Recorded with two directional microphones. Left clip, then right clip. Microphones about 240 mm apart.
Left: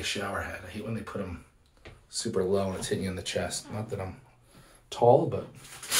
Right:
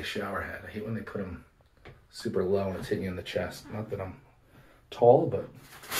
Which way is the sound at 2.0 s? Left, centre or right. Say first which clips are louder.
Left 1 dB; centre.